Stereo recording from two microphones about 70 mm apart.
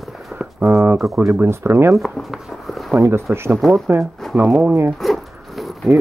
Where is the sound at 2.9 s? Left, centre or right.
Right.